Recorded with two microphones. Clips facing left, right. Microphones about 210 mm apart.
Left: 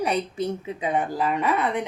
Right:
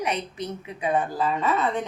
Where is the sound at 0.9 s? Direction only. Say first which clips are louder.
Even; 15° left (ahead or behind).